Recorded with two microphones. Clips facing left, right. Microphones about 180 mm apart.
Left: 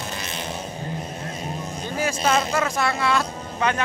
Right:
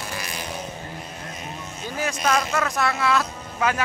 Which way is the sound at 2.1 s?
25° left (ahead or behind).